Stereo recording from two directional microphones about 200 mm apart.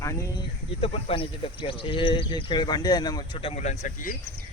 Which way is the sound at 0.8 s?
30° left (ahead or behind).